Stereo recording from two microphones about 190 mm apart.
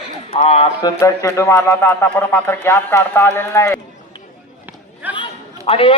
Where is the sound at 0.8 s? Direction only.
15° left (ahead or behind).